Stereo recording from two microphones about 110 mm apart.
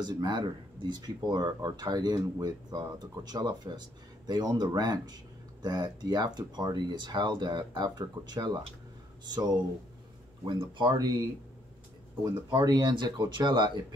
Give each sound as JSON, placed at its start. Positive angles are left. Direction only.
{"t": 0.0, "sound": "speech", "side_deg": -40}
{"t": 12.5, "sound": "speech", "side_deg": -40}